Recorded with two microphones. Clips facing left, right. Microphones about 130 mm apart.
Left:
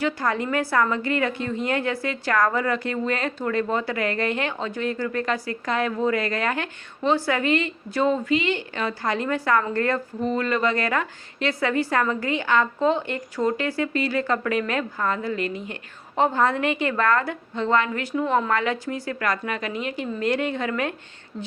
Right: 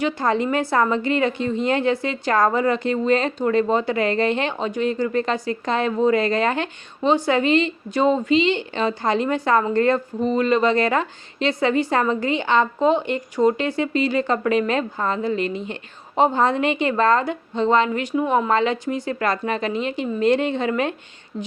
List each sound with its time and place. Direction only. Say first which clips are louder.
0.0 s a woman's voice: right 4 dB; 20° right (ahead or behind)